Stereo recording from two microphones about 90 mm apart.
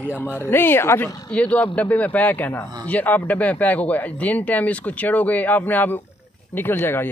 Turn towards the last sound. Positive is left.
turn(degrees=25)  # may be behind; listen again after turning